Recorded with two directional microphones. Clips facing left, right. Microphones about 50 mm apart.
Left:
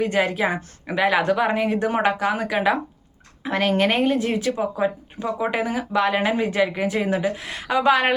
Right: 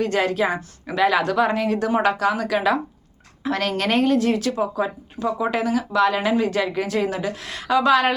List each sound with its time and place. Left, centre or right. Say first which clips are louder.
0.0 s speech: even; centre